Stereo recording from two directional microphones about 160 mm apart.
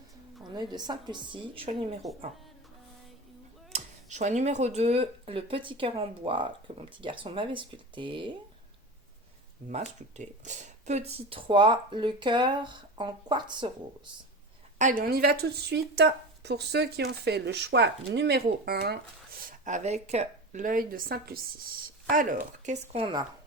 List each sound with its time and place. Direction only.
0.5 s a woman's voice: 25° right (ahead or behind)
3.7 s speech: 50° right (ahead or behind); by 8.3 s 30° right (ahead or behind)
9.6 s speech: 45° right (ahead or behind); by 14.1 s 30° right (ahead or behind)
14.8 s speech: 50° right (ahead or behind)
15.1 s speech: 75° right (ahead or behind)
22.1 s speech: 55° right (ahead or behind)
22.9 s speech: 35° right (ahead or behind)